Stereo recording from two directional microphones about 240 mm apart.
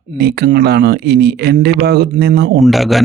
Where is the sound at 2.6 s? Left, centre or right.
Centre.